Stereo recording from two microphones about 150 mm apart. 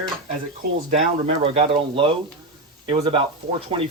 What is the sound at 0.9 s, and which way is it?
Speech, 45° right (ahead or behind).